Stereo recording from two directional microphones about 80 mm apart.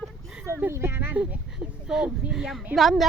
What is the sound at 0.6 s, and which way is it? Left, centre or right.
Speech, right.